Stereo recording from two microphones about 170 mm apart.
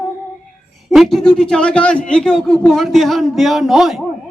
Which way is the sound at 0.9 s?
Centre (ahead or behind).